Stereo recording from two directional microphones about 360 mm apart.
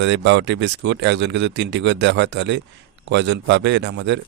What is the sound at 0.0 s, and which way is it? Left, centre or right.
Speech, right.